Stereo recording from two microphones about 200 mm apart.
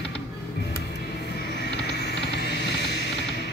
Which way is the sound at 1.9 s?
55° left (ahead or behind).